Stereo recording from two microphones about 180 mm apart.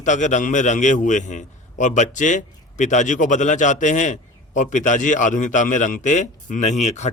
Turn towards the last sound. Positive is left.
turn(degrees=40)  # may be behind; listen again after turning